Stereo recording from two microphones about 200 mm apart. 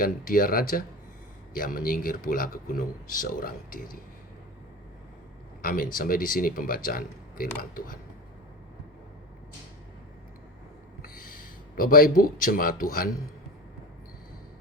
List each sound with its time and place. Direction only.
0.0 s a man's voice: 45° left (ahead or behind)
5.6 s a man's voice: 45° left (ahead or behind)
11.0 s speech: 45° left (ahead or behind)